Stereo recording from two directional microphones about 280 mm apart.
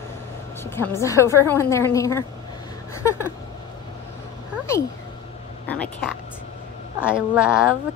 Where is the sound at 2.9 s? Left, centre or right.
Centre.